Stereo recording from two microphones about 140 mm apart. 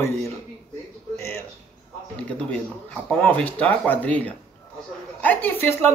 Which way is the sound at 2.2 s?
10° left (ahead or behind).